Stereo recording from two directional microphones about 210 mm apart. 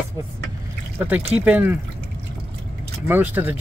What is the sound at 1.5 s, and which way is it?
Speech, 10° right (ahead or behind).